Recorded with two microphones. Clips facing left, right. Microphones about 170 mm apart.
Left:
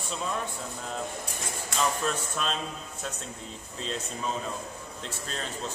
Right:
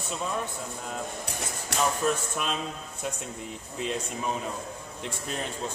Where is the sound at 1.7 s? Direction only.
70° right (ahead or behind).